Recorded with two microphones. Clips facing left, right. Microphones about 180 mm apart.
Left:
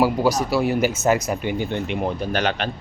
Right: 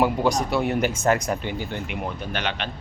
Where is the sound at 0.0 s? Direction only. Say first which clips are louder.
Left 2 dB; 5° left (ahead or behind).